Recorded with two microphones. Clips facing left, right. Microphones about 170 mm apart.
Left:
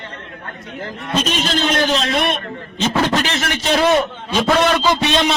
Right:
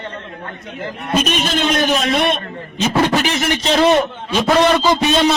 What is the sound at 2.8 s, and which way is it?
A man's voice, 10° right (ahead or behind).